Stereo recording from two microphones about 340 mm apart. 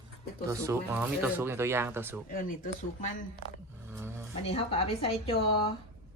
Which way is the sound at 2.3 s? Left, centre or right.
Left.